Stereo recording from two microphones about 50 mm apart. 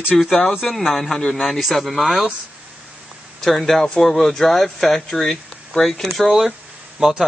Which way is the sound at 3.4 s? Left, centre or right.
Centre.